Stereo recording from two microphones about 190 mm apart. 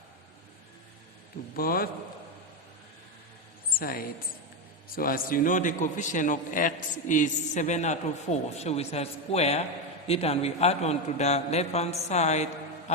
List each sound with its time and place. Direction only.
1.5 s a woman's voice: 50° left (ahead or behind)
3.8 s a woman's voice: 50° left (ahead or behind)